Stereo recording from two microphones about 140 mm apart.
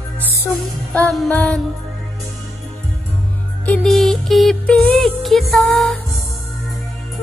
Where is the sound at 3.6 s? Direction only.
5° left (ahead or behind).